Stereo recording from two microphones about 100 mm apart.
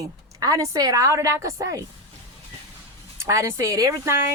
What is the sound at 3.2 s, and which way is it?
Female singing, 30° right (ahead or behind).